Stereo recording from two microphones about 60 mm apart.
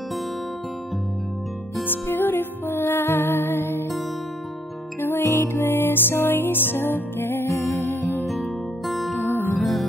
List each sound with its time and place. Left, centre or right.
1.9 s music: left
5.2 s music: left
7.4 s music: left
7.7 s music: left
8.3 s music: centre
9.3 s music: left
9.6 s music: centre